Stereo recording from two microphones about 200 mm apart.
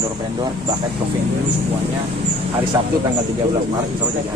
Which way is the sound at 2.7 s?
20° right (ahead or behind).